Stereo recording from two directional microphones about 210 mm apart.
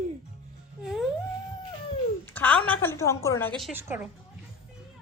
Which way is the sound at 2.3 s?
5° left (ahead or behind).